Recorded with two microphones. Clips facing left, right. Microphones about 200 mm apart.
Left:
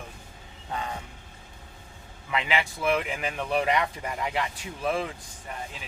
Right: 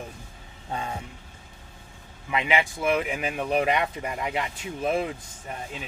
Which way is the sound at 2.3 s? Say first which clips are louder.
Right 3 dB; 20° right (ahead or behind).